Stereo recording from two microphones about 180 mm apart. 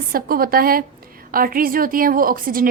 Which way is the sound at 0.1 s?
55° right (ahead or behind).